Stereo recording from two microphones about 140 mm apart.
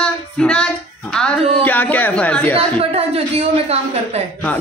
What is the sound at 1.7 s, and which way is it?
A man's voice, 10° left (ahead or behind).